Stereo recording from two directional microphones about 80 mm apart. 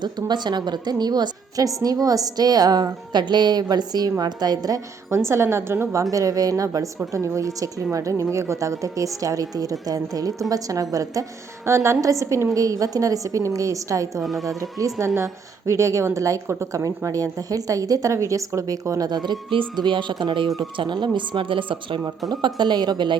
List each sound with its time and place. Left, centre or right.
0.0 s a woman's voice: right
5.1 s a woman's voice: right
14.2 s speech: centre
14.6 s a woman's voice: right
20.7 s a woman's voice: right
21.2 s speech: right
22.3 s a woman's voice: right